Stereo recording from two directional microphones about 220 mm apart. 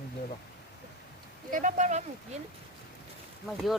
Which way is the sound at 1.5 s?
35° right (ahead or behind).